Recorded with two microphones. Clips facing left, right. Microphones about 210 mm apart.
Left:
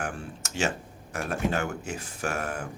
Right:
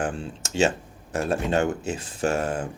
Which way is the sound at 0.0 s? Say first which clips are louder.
Right 6 dB; 25° right (ahead or behind).